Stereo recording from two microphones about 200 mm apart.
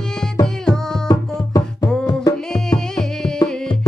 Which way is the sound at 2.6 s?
5° left (ahead or behind).